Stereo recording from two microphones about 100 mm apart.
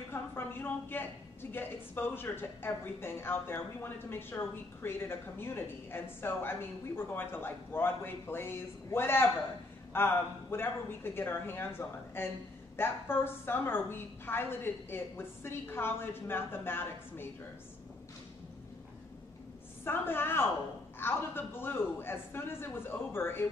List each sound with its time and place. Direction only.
0.1 s a man's voice: 20° left (ahead or behind)
19.8 s a woman's voice: 20° left (ahead or behind)